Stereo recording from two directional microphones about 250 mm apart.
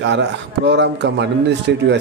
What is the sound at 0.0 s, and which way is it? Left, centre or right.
Speech, right.